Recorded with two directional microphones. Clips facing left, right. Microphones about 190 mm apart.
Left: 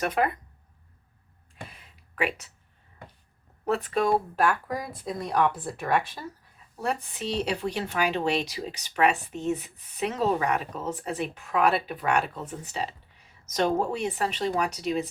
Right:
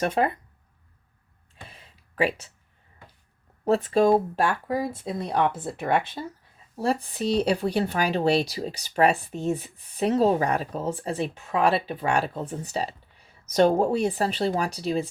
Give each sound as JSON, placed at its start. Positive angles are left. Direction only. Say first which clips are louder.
{"t": 0.0, "sound": "speech", "louder": "right 2 dB", "side_deg": -30}
{"t": 1.6, "sound": "a sound", "louder": "left 2 dB", "side_deg": -30}
{"t": 3.7, "sound": "speech", "louder": "right 5 dB", "side_deg": -30}